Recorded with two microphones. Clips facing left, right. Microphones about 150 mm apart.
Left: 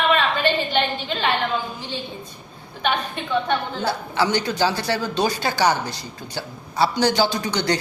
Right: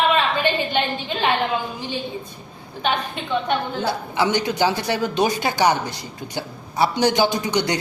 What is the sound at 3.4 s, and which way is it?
A woman's voice, 20° right (ahead or behind).